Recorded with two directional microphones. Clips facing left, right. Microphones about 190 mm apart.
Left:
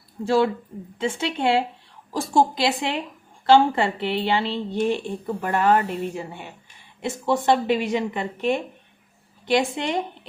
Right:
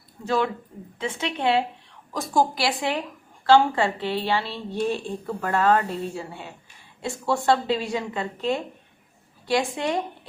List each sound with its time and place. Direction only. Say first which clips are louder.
0.3 s a woman's voice: left 4 dB; 30° left (ahead or behind)